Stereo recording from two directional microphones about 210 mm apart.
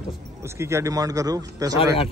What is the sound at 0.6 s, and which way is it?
A man's voice, 15° right (ahead or behind).